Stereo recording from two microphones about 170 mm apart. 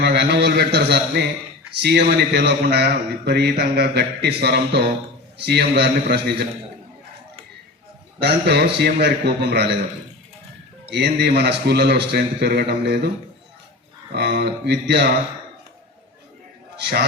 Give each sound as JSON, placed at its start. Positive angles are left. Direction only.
{"t": 0.0, "sound": "a man's voice", "side_deg": -75}
{"t": 8.2, "sound": "a man's voice", "side_deg": -75}
{"t": 10.9, "sound": "a man's voice", "side_deg": -80}
{"t": 14.1, "sound": "a man's voice", "side_deg": -75}
{"t": 16.7, "sound": "a man's voice", "side_deg": -80}